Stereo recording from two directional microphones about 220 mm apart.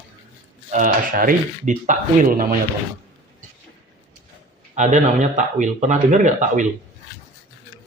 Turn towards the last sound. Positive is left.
turn(degrees=-35)  # may be behind; listen again after turning